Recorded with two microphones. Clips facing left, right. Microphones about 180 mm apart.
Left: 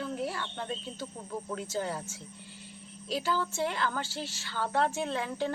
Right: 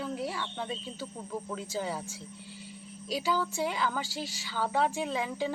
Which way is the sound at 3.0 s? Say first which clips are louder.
Right 1 dB; 10° right (ahead or behind).